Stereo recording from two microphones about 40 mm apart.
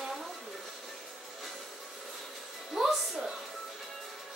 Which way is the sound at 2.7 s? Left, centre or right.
Centre.